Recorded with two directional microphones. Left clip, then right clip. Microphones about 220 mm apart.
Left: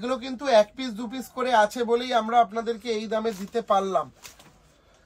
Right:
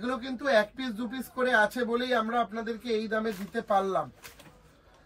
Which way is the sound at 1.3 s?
25° left (ahead or behind).